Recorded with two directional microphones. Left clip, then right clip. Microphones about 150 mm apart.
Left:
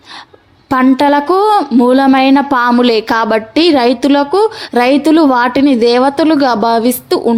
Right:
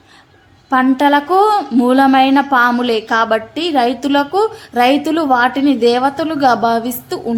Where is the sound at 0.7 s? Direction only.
55° left (ahead or behind).